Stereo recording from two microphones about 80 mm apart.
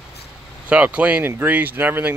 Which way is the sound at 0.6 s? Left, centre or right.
Centre.